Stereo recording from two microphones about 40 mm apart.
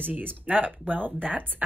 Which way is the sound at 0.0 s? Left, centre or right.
Right.